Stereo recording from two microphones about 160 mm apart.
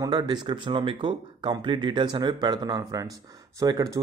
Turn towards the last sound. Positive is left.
turn(degrees=-25)  # may be behind; listen again after turning